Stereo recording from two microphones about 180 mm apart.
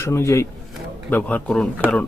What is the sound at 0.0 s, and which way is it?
A man's voice, 15° left (ahead or behind).